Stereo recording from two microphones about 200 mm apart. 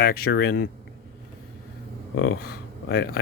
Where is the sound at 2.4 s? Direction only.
55° left (ahead or behind).